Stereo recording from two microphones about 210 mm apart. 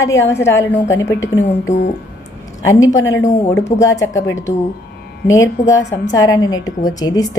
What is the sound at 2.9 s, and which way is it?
Speech, 65° left (ahead or behind).